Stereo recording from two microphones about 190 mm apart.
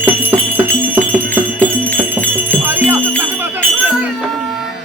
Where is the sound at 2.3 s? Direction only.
10° right (ahead or behind).